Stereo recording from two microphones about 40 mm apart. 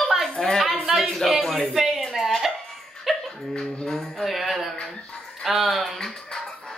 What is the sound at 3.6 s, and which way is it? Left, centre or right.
Music, centre.